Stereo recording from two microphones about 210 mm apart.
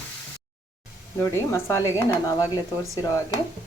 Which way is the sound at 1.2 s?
10° left (ahead or behind).